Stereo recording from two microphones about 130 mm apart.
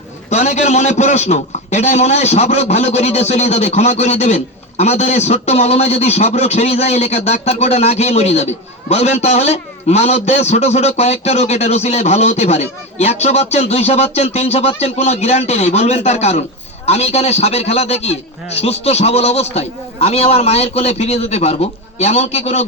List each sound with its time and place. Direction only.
0.3 s a man's voice: 65° left (ahead or behind)